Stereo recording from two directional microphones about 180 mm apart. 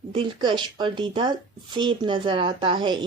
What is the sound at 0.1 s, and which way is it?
Speech, 25° right (ahead or behind).